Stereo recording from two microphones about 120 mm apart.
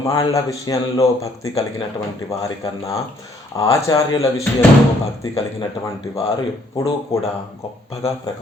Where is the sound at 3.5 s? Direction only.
25° left (ahead or behind).